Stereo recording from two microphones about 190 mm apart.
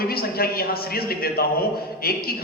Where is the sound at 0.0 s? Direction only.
55° left (ahead or behind).